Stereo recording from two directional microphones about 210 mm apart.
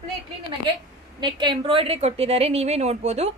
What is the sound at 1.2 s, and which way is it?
A woman's voice, 20° right (ahead or behind).